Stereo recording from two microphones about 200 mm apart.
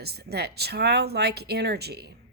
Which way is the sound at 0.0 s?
55° right (ahead or behind).